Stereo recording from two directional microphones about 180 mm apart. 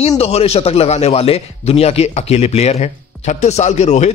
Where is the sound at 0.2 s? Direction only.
35° left (ahead or behind).